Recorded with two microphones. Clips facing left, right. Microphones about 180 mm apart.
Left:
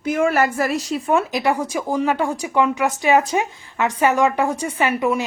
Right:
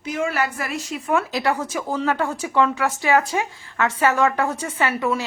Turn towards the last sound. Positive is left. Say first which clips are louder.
# left 3 dB
turn(degrees=15)  # may be behind; listen again after turning